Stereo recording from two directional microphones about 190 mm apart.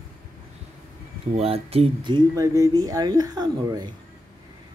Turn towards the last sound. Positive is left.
turn(degrees=-20)  # may be behind; listen again after turning